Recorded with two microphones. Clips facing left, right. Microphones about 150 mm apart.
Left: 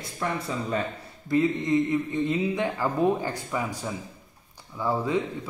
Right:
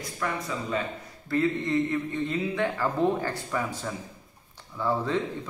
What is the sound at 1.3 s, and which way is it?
A man's voice, 15° left (ahead or behind).